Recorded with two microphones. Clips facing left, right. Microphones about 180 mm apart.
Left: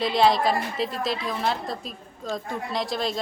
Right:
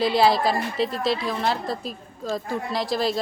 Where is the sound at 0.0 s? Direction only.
5° right (ahead or behind).